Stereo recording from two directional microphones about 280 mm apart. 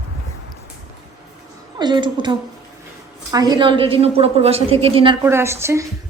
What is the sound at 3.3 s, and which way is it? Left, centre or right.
A woman's voice, centre.